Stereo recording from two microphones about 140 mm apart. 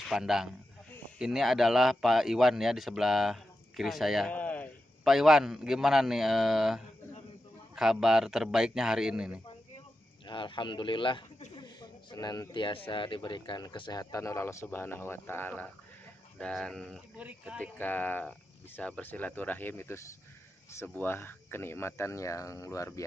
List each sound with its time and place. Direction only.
0.0 s speech: centre (ahead or behind)
4.3 s a sound: 10° left (ahead or behind)
5.0 s speech: centre (ahead or behind)
10.2 s speech: 35° left (ahead or behind)
11.5 s a sound: 30° left (ahead or behind)
12.9 s speech: 35° left (ahead or behind); by 17.0 s 5° left (ahead or behind)
17.2 s speech: 10° right (ahead or behind)
17.6 s speech: 10° left (ahead or behind)